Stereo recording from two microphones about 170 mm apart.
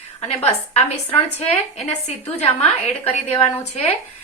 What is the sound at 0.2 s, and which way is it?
A woman's voice, 35° left (ahead or behind).